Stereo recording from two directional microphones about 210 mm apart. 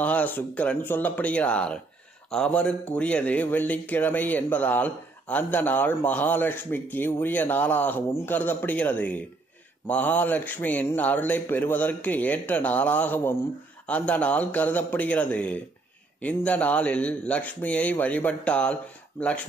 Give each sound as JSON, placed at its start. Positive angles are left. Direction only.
{"t": 0.0, "sound": "a man's voice", "side_deg": 5}